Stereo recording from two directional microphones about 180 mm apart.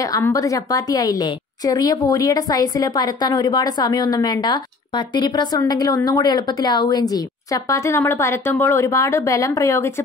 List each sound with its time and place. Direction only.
0.1 s a woman's voice: 20° left (ahead or behind)